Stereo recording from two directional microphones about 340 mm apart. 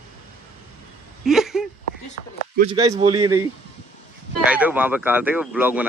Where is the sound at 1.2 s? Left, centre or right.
Centre.